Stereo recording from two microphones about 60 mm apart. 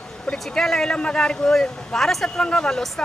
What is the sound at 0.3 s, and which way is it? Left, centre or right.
Speech, centre.